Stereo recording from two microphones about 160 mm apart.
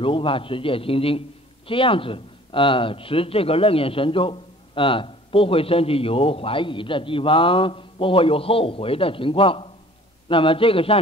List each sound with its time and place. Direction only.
0.0 s speech: 35° left (ahead or behind)